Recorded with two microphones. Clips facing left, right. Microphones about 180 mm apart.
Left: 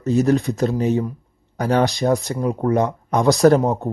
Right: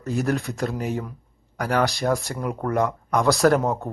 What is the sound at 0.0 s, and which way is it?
A man's voice, 20° left (ahead or behind).